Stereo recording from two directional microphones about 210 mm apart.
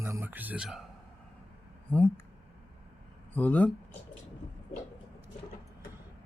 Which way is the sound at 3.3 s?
5° left (ahead or behind).